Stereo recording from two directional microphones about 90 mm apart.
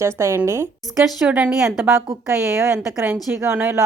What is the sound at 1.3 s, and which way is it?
Speech, 15° right (ahead or behind).